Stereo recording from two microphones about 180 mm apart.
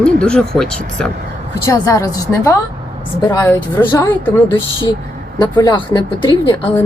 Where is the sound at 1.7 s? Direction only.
20° left (ahead or behind).